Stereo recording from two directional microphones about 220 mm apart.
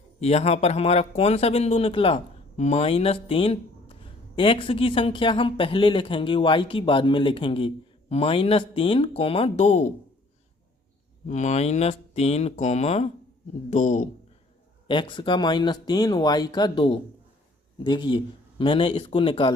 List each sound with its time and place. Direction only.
0.2 s speech: 30° left (ahead or behind)
11.3 s speech: 30° left (ahead or behind)
14.8 s speech: 20° left (ahead or behind)